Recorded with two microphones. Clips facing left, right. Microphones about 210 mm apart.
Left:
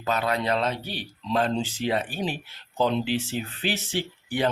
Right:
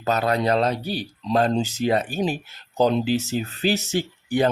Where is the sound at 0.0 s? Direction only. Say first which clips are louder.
Right 4 dB; 40° right (ahead or behind).